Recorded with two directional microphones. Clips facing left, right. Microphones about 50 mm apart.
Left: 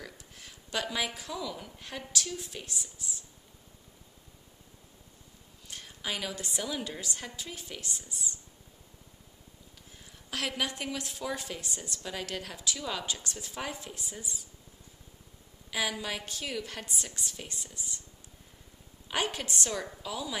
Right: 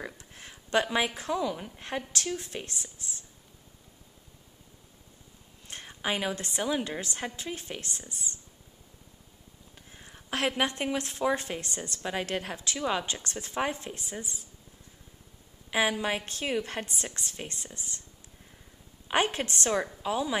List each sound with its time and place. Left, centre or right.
0.0 s speech: right
5.7 s a woman's voice: right
9.8 s speech: right
12.0 s a woman's voice: right
15.7 s a woman's voice: right
19.0 s a woman's voice: right